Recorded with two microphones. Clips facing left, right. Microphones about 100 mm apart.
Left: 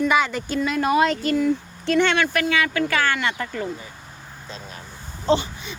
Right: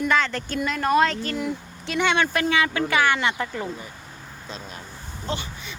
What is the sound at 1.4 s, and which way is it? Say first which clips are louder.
Speech: left 7 dB; 5° right (ahead or behind).